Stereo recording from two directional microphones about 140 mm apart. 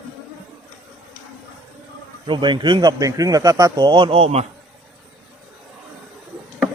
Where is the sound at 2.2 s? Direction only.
35° right (ahead or behind).